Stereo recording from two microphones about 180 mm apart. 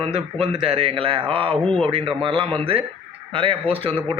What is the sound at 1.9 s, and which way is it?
A man's voice, 30° right (ahead or behind).